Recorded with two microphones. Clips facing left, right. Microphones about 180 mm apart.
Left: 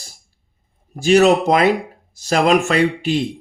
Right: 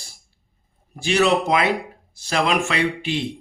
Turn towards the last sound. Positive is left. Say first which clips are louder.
# left 6 dB
turn(degrees=40)  # may be behind; listen again after turning